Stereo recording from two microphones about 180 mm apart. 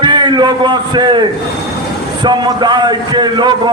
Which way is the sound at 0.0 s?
25° right (ahead or behind).